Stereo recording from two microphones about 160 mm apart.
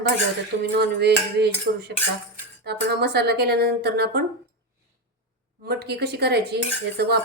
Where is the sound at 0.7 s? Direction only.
90° right.